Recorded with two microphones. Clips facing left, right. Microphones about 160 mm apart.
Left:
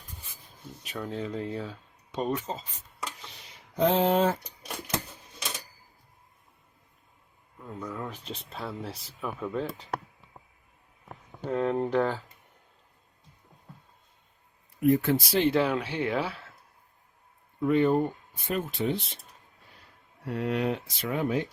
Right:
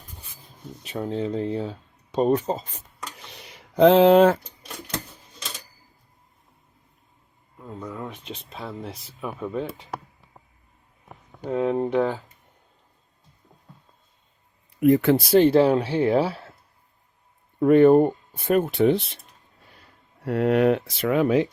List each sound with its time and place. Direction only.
0.9 s speech: 25° right (ahead or behind)
3.3 s a sound: 70° right (ahead or behind)
7.9 s a sound: 10° right (ahead or behind)
8.4 s speech: centre (ahead or behind)
11.3 s speech: 10° right (ahead or behind)
14.8 s speech: 85° right; by 15.4 s 55° right (ahead or behind)
15.4 s speech: 35° right (ahead or behind)
17.6 s speech: 60° right (ahead or behind)
20.2 s speech: 65° right (ahead or behind); by 21.4 s 90° right